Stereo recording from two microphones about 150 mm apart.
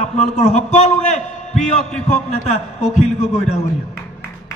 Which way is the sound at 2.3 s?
45° left (ahead or behind).